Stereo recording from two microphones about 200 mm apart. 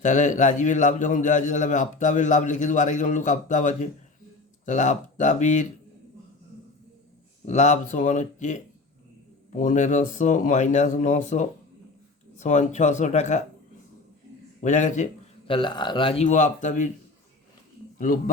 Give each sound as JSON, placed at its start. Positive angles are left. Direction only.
{"t": 0.0, "sound": "a man's voice", "side_deg": 40}
{"t": 7.4, "sound": "a man's voice", "side_deg": 35}
{"t": 14.6, "sound": "a man's voice", "side_deg": 40}
{"t": 17.9, "sound": "a sound", "side_deg": 45}